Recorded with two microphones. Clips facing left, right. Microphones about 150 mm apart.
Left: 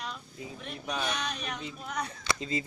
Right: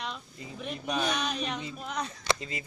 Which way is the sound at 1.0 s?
20° right (ahead or behind).